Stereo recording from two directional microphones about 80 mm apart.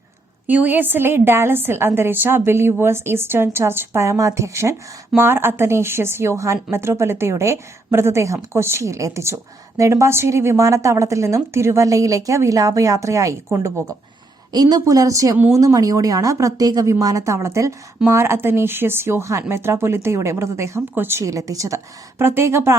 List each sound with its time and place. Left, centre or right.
0.4 s a woman's voice: right
14.5 s a woman's voice: right
21.2 s speech: right
22.2 s a woman's voice: right